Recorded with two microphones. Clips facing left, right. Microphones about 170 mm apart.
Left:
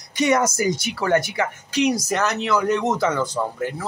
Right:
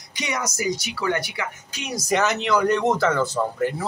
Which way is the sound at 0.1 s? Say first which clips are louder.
Left 10 dB; 50° left (ahead or behind).